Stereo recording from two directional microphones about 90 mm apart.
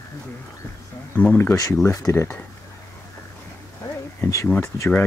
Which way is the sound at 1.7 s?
30° left (ahead or behind).